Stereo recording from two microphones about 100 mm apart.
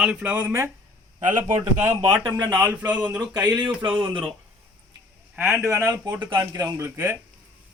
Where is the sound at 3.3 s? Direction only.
40° right (ahead or behind).